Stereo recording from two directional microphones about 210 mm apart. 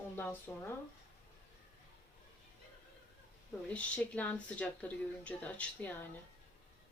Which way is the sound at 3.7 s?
5° left (ahead or behind).